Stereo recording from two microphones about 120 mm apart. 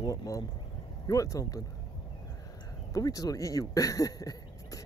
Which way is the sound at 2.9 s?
30° left (ahead or behind).